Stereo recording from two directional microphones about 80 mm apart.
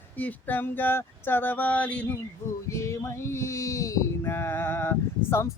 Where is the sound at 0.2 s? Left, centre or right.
Left.